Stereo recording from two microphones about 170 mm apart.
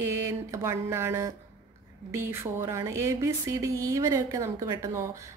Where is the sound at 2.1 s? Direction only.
15° right (ahead or behind).